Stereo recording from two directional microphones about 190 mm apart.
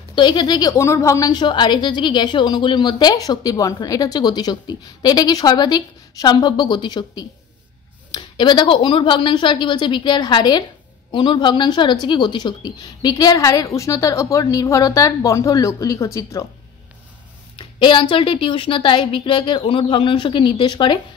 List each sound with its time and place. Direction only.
0.1 s a woman's voice: 25° left (ahead or behind)
17.6 s a woman's voice: 25° left (ahead or behind)